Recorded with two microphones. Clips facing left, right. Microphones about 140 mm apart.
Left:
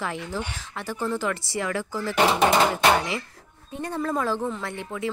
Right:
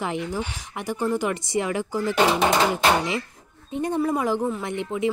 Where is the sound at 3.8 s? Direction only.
20° right (ahead or behind).